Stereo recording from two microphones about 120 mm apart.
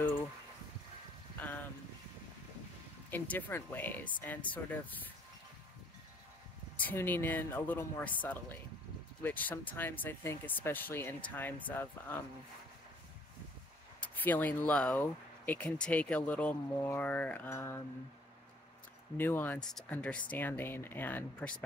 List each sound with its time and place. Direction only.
1.4 s boat: 15° left (ahead or behind)
3.1 s speech: 15° left (ahead or behind)
6.8 s speech: 15° left (ahead or behind)
14.0 s speech: 15° left (ahead or behind)
19.1 s speech: 15° left (ahead or behind)